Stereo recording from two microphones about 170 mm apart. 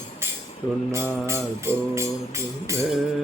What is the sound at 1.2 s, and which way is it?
Tambourine, 15° right (ahead or behind).